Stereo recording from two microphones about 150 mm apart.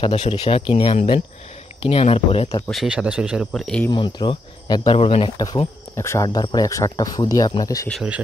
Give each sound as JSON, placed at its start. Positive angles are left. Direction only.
{"t": 0.0, "sound": "speech", "side_deg": 40}
{"t": 2.7, "sound": "speech", "side_deg": -5}
{"t": 3.9, "sound": "speech", "side_deg": 30}
{"t": 4.8, "sound": "speech", "side_deg": 40}
{"t": 5.9, "sound": "speech", "side_deg": 20}